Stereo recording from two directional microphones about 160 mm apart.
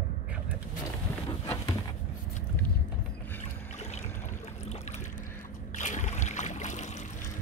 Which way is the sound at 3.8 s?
45° left (ahead or behind).